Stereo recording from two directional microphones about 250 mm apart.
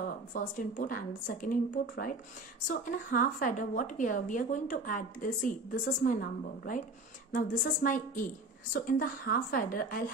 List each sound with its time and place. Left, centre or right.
0.3 s a woman's voice: left